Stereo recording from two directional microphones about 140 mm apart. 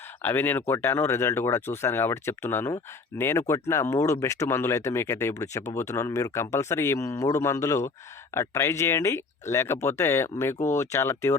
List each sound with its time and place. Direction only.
0.2 s speech: 15° left (ahead or behind)